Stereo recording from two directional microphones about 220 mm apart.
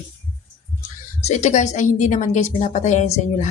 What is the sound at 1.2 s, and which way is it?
A woman's voice, 30° left (ahead or behind).